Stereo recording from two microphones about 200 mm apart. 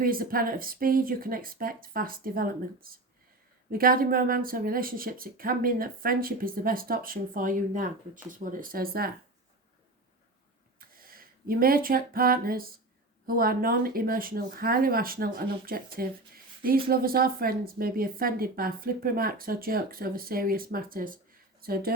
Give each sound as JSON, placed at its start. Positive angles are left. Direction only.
{"t": 0.0, "sound": "speech", "side_deg": -45}
{"t": 10.8, "sound": "a sound", "side_deg": -45}
{"t": 13.2, "sound": "speech", "side_deg": -45}